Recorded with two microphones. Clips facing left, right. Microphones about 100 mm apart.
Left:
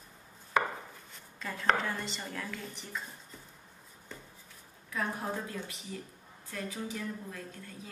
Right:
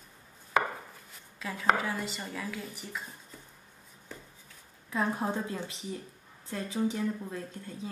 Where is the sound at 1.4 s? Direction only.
5° right (ahead or behind).